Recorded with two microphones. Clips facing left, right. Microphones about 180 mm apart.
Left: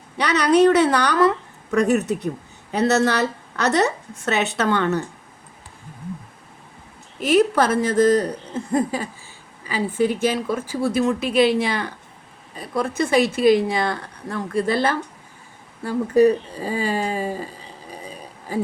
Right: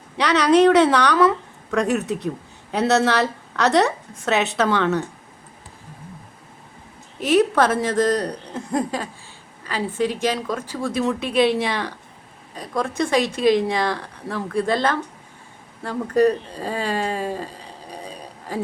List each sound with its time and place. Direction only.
0.2 s speech: centre (ahead or behind)
7.2 s speech: centre (ahead or behind)